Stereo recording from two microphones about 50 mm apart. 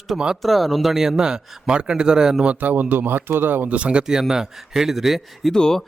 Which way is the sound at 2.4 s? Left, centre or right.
Right.